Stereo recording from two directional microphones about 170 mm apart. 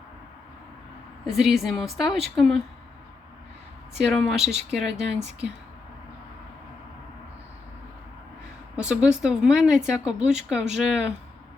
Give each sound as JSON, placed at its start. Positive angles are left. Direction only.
{"t": 1.2, "sound": "speech", "side_deg": 0}
{"t": 3.9, "sound": "speech", "side_deg": -5}
{"t": 5.1, "sound": "speech", "side_deg": -40}
{"t": 8.7, "sound": "speech", "side_deg": -5}